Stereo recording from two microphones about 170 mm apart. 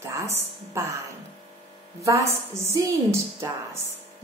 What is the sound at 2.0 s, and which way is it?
A woman's voice, 15° right (ahead or behind).